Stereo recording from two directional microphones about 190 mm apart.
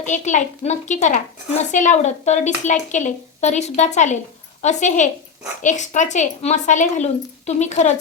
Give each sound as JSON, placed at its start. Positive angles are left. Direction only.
{"t": 0.0, "sound": "a woman's voice", "side_deg": 40}